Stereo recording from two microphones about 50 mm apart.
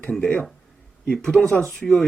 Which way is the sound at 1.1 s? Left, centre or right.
Centre.